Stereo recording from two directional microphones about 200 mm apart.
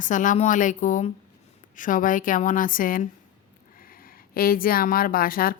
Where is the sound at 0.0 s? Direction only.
40° left (ahead or behind).